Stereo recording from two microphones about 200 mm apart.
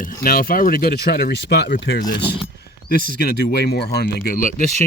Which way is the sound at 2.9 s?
50° left (ahead or behind).